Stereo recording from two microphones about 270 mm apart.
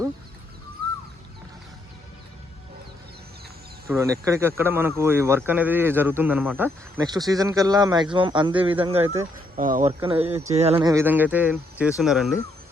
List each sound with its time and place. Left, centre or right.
3.8 s speech: centre
9.3 s speech: right
10.8 s speech: centre